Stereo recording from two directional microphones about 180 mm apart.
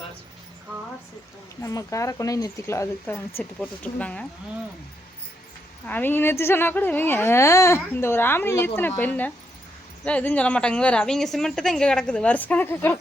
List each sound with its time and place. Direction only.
1.6 s speech: 15° left (ahead or behind)
5.8 s speech: 10° left (ahead or behind)